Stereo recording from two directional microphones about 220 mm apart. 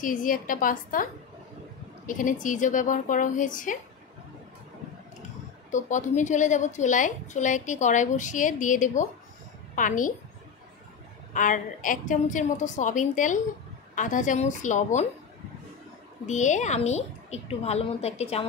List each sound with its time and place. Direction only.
0.0 s a woman's voice: 35° left (ahead or behind)
2.0 s a woman's voice: 35° left (ahead or behind)
5.7 s a woman's voice: 35° left (ahead or behind)
11.3 s a woman's voice: 35° left (ahead or behind)
16.3 s a woman's voice: 35° left (ahead or behind)